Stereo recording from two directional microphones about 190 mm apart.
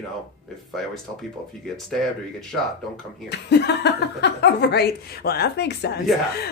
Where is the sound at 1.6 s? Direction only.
Centre (ahead or behind).